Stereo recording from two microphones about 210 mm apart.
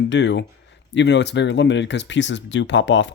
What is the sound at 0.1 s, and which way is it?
Speech, 55° left (ahead or behind).